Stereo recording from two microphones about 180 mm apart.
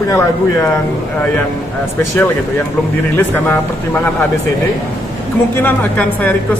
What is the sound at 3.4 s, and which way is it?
Speech, 10° left (ahead or behind).